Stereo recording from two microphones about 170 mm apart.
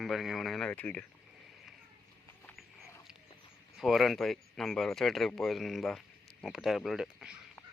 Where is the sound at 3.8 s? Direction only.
Centre (ahead or behind).